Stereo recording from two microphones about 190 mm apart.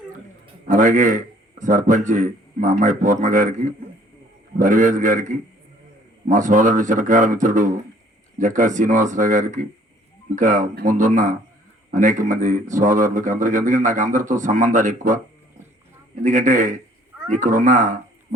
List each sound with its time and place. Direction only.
0.7 s a man's voice: 40° right (ahead or behind)
6.2 s a man's voice: 40° right (ahead or behind)
16.2 s a man's voice: 40° right (ahead or behind)